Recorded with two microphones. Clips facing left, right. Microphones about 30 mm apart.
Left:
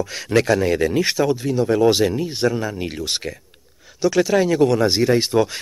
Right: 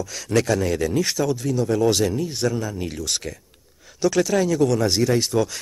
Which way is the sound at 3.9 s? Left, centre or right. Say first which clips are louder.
Left 2 dB; centre.